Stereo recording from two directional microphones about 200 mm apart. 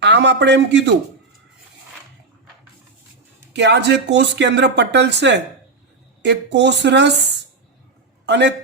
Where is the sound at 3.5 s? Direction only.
60° right (ahead or behind).